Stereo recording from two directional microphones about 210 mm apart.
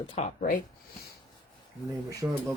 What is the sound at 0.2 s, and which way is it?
Speech, 30° left (ahead or behind).